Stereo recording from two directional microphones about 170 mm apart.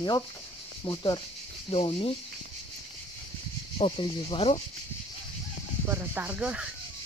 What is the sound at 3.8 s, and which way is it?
Speech, 30° left (ahead or behind).